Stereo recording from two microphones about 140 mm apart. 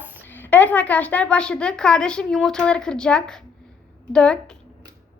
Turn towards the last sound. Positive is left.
turn(degrees=5)  # may be behind; listen again after turning